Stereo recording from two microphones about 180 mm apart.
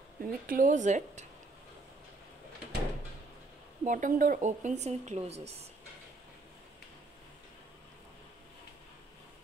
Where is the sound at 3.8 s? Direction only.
45° right (ahead or behind).